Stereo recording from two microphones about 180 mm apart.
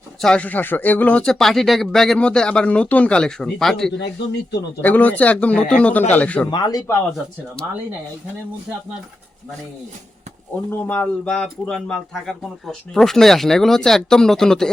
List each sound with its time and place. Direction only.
0.2 s speech: 5° left (ahead or behind)
6.5 s speech: 20° left (ahead or behind)
10.7 s speech: 10° left (ahead or behind)